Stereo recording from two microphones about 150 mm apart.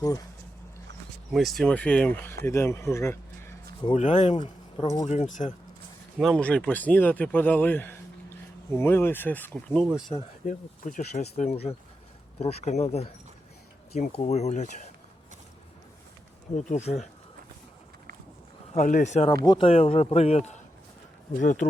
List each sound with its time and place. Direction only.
1.3 s speech: centre (ahead or behind); by 3.5 s 15° left (ahead or behind)
3.9 s speech: 50° left (ahead or behind)
4.4 s speech: 30° left (ahead or behind)
5.0 s speech: 50° left (ahead or behind)
6.1 s speech: 5° left (ahead or behind)
10.4 s speech: 55° left (ahead or behind)
14.2 s speech: 50° left (ahead or behind)
16.6 s speech: 50° left (ahead or behind)
18.7 s speech: 55° left (ahead or behind)
19.5 s speech: 35° left (ahead or behind)
21.4 s speech: 60° left (ahead or behind)